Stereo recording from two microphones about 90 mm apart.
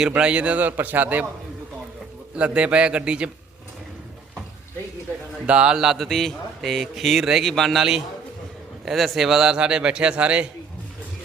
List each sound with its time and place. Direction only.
0.0 s a man's voice: 10° right (ahead or behind)
2.3 s a man's voice: 10° right (ahead or behind)
5.5 s a man's voice: 10° right (ahead or behind)